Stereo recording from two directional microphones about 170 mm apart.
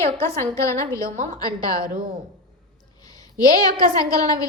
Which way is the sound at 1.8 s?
55° right (ahead or behind).